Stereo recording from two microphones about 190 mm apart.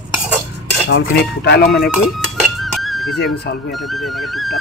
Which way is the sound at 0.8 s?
70° left (ahead or behind).